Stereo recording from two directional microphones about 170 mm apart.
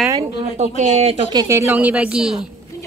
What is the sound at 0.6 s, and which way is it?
Speech, 40° right (ahead or behind).